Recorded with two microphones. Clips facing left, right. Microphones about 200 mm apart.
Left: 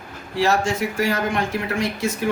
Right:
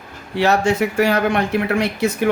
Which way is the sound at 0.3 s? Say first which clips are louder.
Right 4 dB; 65° right (ahead or behind).